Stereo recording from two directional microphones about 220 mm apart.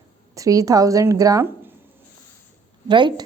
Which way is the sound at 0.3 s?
15° right (ahead or behind).